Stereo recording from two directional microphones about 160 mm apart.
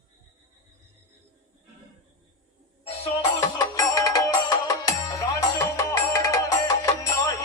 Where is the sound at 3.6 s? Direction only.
20° left (ahead or behind).